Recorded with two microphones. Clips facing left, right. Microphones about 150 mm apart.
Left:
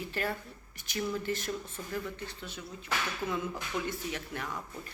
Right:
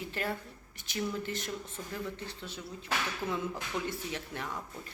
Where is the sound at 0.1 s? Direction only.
20° right (ahead or behind).